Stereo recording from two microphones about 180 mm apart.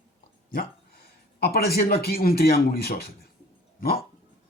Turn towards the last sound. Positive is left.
turn(degrees=55)  # may be behind; listen again after turning